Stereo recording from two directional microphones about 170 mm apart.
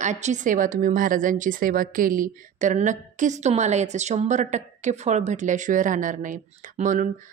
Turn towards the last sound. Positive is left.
turn(degrees=-50)  # may be behind; listen again after turning